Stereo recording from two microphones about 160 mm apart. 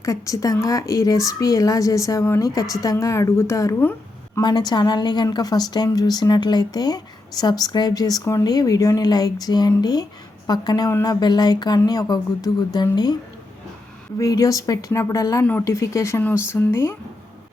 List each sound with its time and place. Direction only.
0.0 s a woman's voice: 20° left (ahead or behind)
14.2 s a woman's voice: 20° left (ahead or behind)